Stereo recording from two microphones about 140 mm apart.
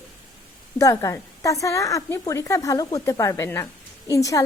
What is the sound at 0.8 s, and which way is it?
A woman's voice, 25° left (ahead or behind).